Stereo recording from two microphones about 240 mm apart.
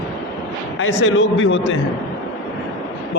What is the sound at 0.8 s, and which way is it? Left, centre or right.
Speech, left.